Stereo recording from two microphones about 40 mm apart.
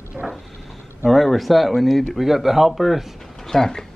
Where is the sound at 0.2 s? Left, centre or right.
Right.